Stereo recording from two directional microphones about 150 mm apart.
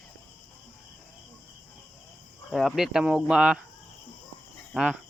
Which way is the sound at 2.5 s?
Centre (ahead or behind).